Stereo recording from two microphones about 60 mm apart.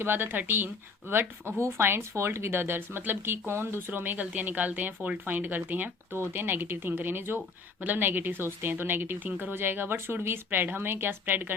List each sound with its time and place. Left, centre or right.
0.0 s speech: right